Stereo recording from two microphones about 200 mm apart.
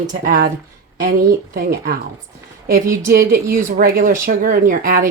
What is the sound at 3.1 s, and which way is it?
Speech, 45° right (ahead or behind).